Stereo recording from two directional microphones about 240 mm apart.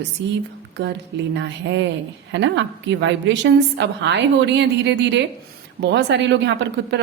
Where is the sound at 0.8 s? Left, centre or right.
Right.